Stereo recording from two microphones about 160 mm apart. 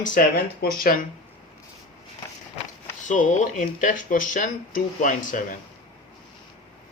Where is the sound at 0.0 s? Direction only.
60° left (ahead or behind).